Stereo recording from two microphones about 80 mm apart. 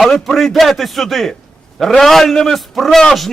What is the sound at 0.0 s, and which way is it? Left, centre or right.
A man's voice, centre.